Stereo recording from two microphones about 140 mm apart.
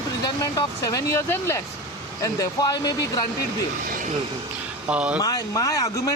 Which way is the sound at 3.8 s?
70° right (ahead or behind).